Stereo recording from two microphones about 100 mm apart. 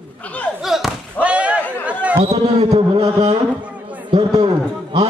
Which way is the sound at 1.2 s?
10° right (ahead or behind).